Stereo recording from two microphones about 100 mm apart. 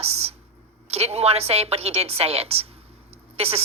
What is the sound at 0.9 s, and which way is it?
A woman's voice, 90° right.